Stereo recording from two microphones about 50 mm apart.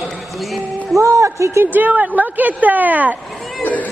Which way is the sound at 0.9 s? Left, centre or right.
Right.